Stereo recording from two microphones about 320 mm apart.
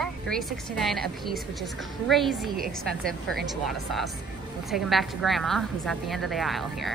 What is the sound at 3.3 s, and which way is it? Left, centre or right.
A woman's voice, centre.